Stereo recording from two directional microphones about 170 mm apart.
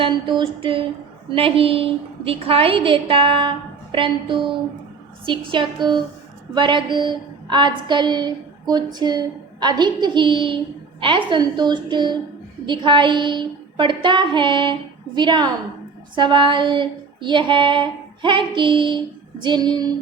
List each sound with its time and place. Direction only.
0.0 s a woman's voice: 30° right (ahead or behind)